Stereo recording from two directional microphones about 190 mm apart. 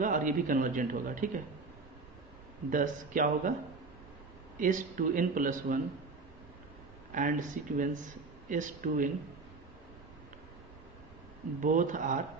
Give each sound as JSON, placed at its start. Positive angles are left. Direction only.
{"t": 0.0, "sound": "speech", "side_deg": -45}
{"t": 2.7, "sound": "speech", "side_deg": -45}
{"t": 4.6, "sound": "speech", "side_deg": -45}
{"t": 7.1, "sound": "speech", "side_deg": -45}
{"t": 11.6, "sound": "speech", "side_deg": -45}